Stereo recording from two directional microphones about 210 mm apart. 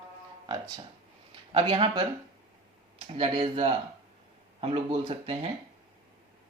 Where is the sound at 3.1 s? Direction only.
25° right (ahead or behind).